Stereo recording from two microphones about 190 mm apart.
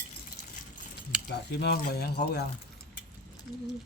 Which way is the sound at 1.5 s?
60° left (ahead or behind).